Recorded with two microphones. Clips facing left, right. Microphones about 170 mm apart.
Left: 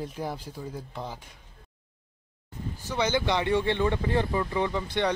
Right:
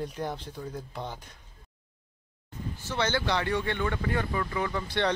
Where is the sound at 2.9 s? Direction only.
15° left (ahead or behind).